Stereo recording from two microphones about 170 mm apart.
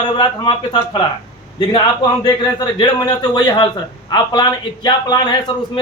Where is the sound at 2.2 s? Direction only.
25° left (ahead or behind).